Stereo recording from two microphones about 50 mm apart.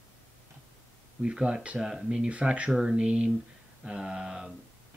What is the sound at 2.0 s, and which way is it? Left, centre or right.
Speech, centre.